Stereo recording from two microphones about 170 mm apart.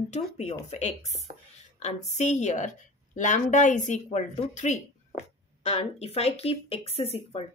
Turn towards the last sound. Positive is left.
turn(degrees=35)  # may be behind; listen again after turning